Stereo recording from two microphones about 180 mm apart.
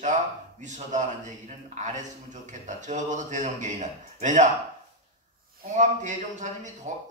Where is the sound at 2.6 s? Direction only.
40° right (ahead or behind).